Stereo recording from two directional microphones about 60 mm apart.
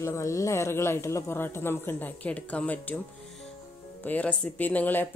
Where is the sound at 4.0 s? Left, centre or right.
Left.